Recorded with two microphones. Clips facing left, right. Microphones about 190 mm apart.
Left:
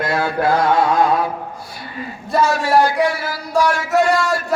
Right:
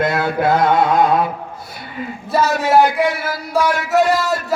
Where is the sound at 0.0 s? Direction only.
20° right (ahead or behind).